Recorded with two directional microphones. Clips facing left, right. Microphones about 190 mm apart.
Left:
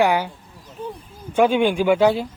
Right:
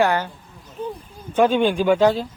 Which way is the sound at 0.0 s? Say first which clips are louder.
Left 1 dB; 10° left (ahead or behind).